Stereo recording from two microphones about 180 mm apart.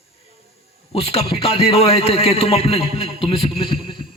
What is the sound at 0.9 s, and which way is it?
A man's voice, 35° left (ahead or behind).